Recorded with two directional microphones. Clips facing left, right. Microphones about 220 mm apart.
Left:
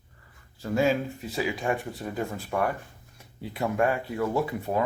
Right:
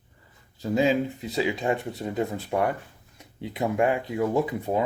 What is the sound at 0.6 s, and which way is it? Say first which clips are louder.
Speech: right 2 dB; 20° right (ahead or behind).